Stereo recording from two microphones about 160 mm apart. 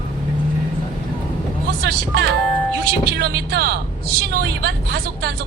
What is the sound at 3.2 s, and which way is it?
Speech, 80° right.